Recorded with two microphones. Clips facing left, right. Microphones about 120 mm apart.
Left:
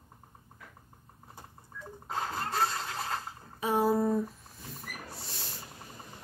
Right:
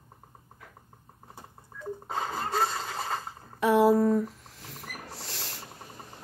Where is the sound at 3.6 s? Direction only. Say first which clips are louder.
Right 6 dB; 85° right.